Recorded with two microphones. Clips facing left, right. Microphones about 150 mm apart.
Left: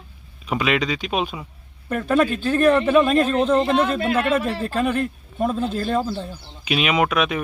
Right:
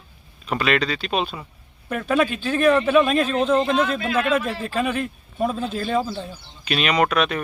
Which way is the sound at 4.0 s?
55° left (ahead or behind).